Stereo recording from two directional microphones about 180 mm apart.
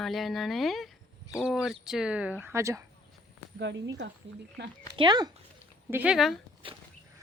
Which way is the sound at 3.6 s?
85° right.